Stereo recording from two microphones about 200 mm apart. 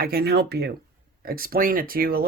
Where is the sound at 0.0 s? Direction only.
50° right (ahead or behind).